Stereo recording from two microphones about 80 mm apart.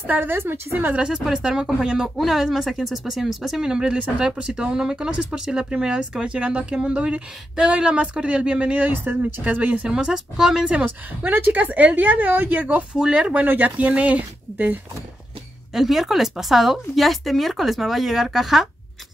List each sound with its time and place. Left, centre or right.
0.0 s speech: right
1.0 s a woman's voice: centre
9.9 s speech: centre
15.7 s a woman's voice: centre